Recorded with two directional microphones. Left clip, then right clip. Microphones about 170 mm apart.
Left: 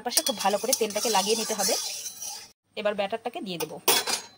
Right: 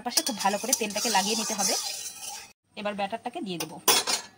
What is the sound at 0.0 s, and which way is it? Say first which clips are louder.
Speech: left 1 dB; 15° left (ahead or behind).